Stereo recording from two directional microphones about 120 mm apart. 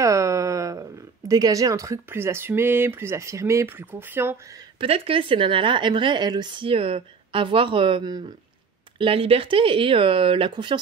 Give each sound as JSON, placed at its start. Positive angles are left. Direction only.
{"t": 0.0, "sound": "speech", "side_deg": -25}
{"t": 4.7, "sound": "speech", "side_deg": -50}
{"t": 8.9, "sound": "speech", "side_deg": -50}